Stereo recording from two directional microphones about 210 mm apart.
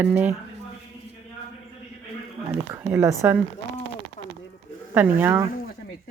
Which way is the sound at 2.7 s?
10° right (ahead or behind).